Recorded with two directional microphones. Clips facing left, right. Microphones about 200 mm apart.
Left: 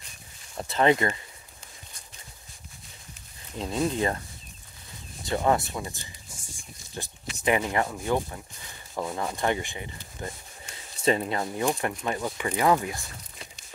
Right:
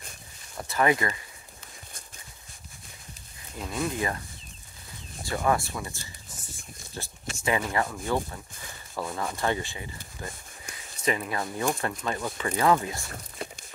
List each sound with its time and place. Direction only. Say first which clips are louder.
0.6 s speech: left 2 dB; 25° left (ahead or behind)
3.5 s speech: left 3 dB; 25° left (ahead or behind)
5.2 s a sound: left 2 dB; 20° left (ahead or behind)
7.4 s speech: left 2 dB; 20° left (ahead or behind)
11.1 s speech: left 4 dB; 25° left (ahead or behind)
13.1 s a sound: right 8 dB; 55° right (ahead or behind)